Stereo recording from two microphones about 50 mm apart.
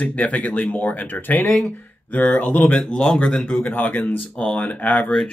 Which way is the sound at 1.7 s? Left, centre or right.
Left.